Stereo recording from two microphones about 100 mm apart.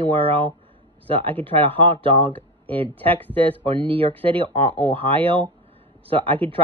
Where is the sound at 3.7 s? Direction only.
60° right (ahead or behind).